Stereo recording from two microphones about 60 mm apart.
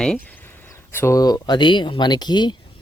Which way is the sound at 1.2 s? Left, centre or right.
Left.